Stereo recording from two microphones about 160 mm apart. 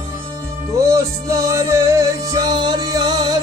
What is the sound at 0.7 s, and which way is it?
Music, 20° right (ahead or behind).